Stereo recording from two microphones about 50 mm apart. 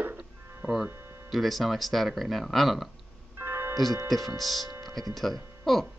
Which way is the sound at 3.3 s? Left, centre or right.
Right.